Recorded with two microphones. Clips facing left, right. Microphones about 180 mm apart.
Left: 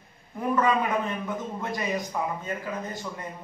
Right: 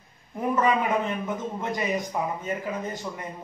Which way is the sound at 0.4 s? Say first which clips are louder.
Right 1 dB; 20° right (ahead or behind).